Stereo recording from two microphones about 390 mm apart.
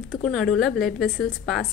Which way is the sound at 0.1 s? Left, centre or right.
Centre.